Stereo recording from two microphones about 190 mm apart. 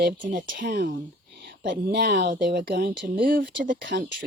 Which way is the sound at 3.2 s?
50° right (ahead or behind).